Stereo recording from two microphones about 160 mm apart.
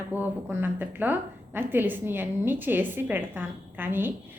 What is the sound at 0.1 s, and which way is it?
A woman's voice, 10° right (ahead or behind).